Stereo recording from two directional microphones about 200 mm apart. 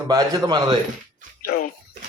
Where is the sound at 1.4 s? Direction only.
45° left (ahead or behind).